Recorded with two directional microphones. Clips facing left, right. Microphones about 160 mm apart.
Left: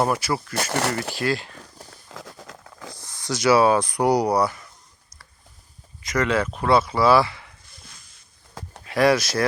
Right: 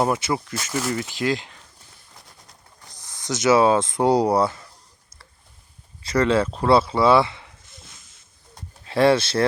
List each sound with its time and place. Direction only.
0.0 s speech: 20° right (ahead or behind)
0.5 s speech: 65° left (ahead or behind)
1.1 s speech: 20° right (ahead or behind)
1.8 s a sound: 90° left
3.0 s speech: 20° right (ahead or behind)
6.0 s speech: 30° right (ahead or behind)
8.8 s speech: 30° right (ahead or behind)